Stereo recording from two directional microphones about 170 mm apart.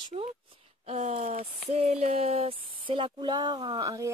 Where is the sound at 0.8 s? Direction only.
40° right (ahead or behind).